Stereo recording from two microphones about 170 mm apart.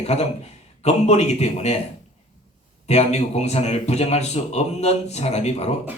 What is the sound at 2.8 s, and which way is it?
Speech, 40° left (ahead or behind).